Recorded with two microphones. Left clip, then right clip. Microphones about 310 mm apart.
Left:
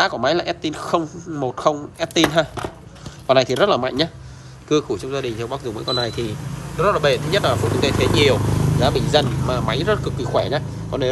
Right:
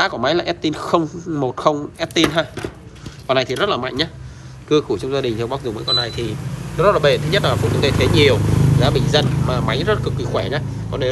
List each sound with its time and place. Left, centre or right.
0.0 s speech: centre